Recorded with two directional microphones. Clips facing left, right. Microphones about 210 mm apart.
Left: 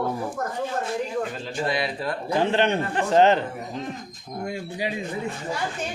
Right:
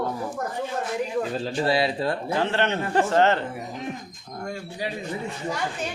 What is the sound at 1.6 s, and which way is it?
Speech, 30° right (ahead or behind).